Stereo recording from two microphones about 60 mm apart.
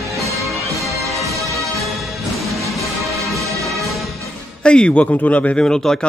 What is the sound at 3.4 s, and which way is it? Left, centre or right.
Music, right.